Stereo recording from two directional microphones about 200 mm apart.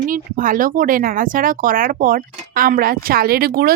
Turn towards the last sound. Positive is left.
turn(degrees=-50)  # may be behind; listen again after turning